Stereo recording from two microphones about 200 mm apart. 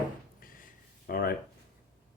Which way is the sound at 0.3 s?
45° left (ahead or behind).